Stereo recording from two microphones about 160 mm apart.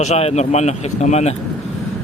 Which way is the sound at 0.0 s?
40° left (ahead or behind).